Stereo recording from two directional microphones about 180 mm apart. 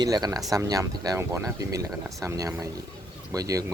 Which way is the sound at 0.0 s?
20° right (ahead or behind).